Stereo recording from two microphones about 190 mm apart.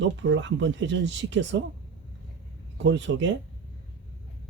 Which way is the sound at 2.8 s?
70° right (ahead or behind).